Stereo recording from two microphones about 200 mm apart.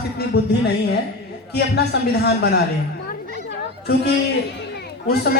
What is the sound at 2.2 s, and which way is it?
Speech, 55° left (ahead or behind).